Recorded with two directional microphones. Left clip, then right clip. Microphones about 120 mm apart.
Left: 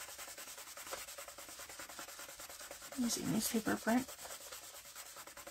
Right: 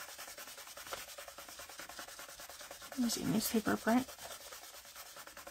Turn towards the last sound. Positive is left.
turn(degrees=-55)  # may be behind; listen again after turning